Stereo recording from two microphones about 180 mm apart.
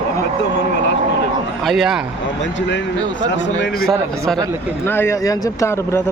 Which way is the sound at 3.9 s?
5° left (ahead or behind).